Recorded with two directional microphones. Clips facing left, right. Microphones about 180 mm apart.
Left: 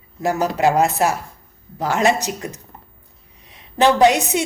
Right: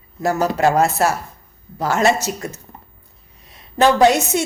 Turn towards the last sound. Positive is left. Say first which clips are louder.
# right 1 dB
turn(degrees=15)  # may be behind; listen again after turning